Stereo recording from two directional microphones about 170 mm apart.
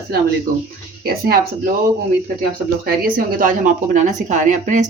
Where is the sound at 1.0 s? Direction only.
65° right (ahead or behind).